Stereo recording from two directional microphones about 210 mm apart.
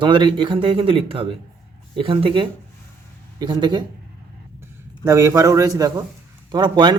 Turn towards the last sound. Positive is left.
turn(degrees=-20)  # may be behind; listen again after turning